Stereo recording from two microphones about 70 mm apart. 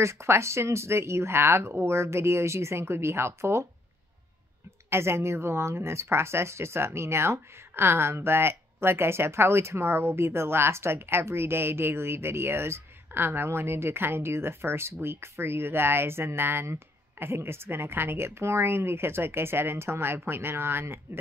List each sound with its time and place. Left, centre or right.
0.0 s speech: right
4.8 s speech: right